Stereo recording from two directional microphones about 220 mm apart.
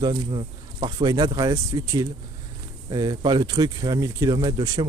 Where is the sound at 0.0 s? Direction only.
20° right (ahead or behind).